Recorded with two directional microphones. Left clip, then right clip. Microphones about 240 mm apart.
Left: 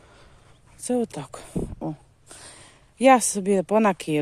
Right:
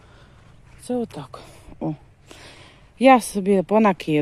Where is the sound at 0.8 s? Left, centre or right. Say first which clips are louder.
Left 1 dB; left.